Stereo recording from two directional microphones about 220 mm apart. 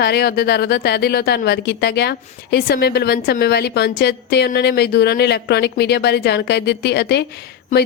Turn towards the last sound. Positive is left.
turn(degrees=35)  # may be behind; listen again after turning